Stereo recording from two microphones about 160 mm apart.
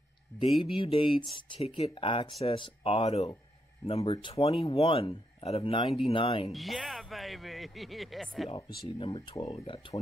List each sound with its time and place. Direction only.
0.3 s speech: 15° left (ahead or behind)
0.7 s speech: 35° left (ahead or behind)
6.5 s speech: centre (ahead or behind)
8.5 s speech: 35° left (ahead or behind)